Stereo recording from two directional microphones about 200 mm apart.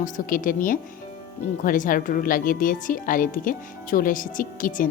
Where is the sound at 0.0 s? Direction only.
45° left (ahead or behind).